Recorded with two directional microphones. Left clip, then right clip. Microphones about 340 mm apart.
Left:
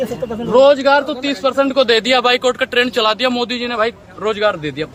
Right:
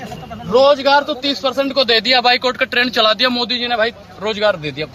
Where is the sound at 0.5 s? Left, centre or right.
Centre.